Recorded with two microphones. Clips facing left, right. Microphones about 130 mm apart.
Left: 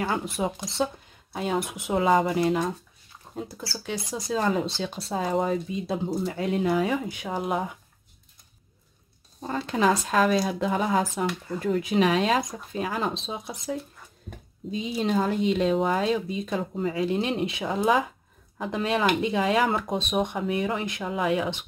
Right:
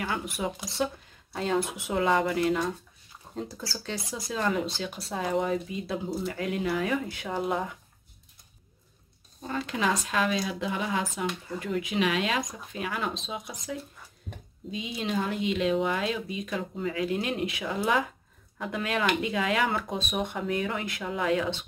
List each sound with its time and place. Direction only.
0.0 s speech: 30° left (ahead or behind)
1.3 s speech: 15° left (ahead or behind)
3.3 s a sound: centre (ahead or behind)
3.7 s speech: 15° left (ahead or behind)
4.3 s speech: 30° left (ahead or behind)
9.4 s speech: 35° left (ahead or behind); by 21.6 s 15° left (ahead or behind)